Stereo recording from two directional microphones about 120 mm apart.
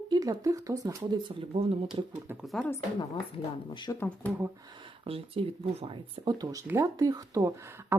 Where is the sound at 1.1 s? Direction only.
40° right (ahead or behind).